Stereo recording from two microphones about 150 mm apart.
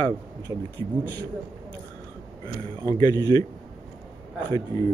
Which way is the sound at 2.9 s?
25° left (ahead or behind).